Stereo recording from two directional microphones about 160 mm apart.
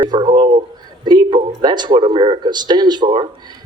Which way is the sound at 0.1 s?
30° right (ahead or behind).